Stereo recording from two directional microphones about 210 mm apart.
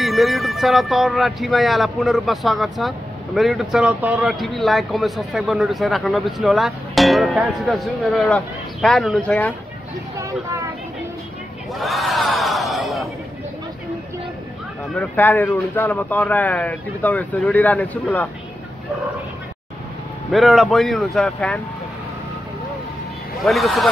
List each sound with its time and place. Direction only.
0.0 s a man's voice: centre (ahead or behind)
11.8 s speech: centre (ahead or behind)
15.0 s speech: 10° left (ahead or behind)
20.2 s a man's voice: centre (ahead or behind)
23.4 s a man's voice: centre (ahead or behind)